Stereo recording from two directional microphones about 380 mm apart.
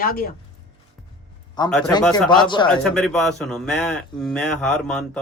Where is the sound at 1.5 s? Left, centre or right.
Centre.